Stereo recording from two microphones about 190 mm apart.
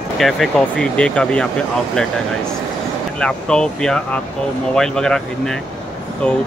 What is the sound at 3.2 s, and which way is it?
Speech, 5° left (ahead or behind).